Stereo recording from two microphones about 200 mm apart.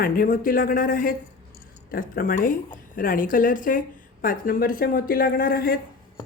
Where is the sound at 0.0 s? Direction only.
45° left (ahead or behind).